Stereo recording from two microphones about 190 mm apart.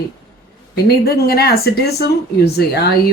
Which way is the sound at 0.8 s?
55° left (ahead or behind).